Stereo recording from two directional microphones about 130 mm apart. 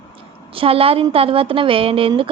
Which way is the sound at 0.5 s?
45° right (ahead or behind).